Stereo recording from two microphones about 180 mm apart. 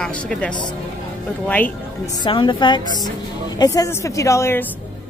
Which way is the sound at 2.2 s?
25° left (ahead or behind).